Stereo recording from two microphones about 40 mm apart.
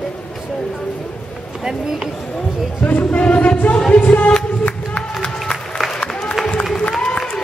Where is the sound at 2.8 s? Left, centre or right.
Left.